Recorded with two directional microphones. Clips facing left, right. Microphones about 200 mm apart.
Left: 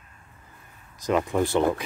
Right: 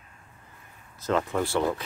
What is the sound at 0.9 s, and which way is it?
Speech, 15° left (ahead or behind).